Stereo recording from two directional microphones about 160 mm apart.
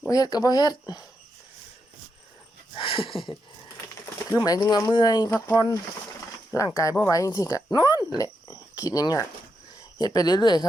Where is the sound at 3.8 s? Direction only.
20° left (ahead or behind).